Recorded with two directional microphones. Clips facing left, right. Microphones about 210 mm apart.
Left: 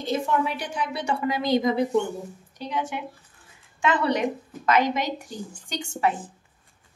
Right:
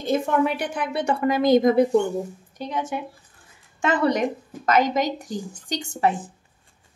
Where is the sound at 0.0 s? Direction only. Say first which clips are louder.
Right 4 dB; 50° right (ahead or behind).